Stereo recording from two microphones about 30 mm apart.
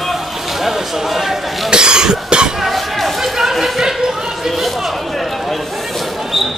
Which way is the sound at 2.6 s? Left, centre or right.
Centre.